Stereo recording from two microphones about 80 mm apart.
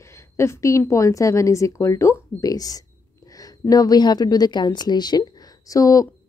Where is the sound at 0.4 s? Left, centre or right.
Left.